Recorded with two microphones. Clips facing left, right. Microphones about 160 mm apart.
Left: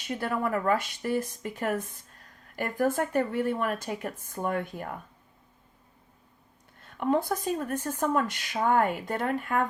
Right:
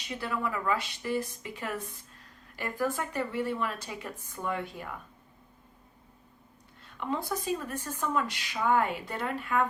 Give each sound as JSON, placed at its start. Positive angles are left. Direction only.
{"t": 0.1, "sound": "a woman's voice", "side_deg": 50}
{"t": 6.9, "sound": "a woman's voice", "side_deg": 50}